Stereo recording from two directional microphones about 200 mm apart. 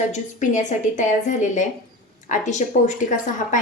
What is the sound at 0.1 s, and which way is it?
Speech, 35° left (ahead or behind).